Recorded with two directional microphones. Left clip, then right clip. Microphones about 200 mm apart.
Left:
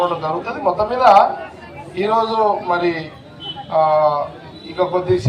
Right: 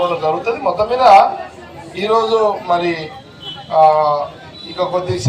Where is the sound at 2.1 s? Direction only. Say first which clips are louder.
Right 2 dB; 50° right (ahead or behind).